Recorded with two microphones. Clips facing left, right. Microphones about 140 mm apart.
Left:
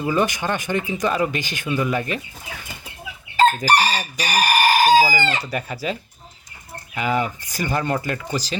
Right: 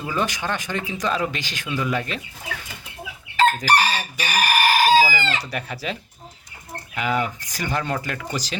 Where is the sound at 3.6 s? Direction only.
35° left (ahead or behind).